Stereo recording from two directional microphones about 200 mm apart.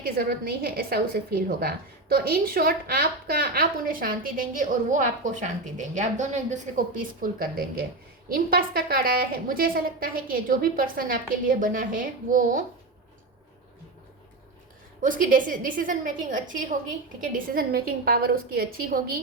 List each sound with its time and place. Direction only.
0.0 s a woman's voice: 50° right (ahead or behind)
15.0 s a woman's voice: 45° right (ahead or behind)